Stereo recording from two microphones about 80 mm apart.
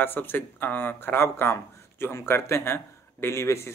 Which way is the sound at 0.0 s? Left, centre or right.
Left.